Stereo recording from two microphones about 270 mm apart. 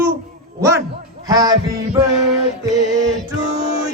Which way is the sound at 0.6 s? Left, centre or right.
Centre.